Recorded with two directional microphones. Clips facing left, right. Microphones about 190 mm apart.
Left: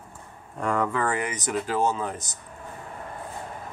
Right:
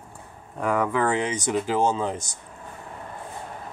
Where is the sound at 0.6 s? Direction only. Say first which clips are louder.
Right 2 dB; 5° right (ahead or behind).